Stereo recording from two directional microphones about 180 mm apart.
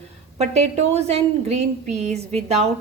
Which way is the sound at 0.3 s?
35° right (ahead or behind).